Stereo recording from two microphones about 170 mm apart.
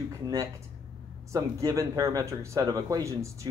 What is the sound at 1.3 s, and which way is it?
A man's voice, 20° right (ahead or behind).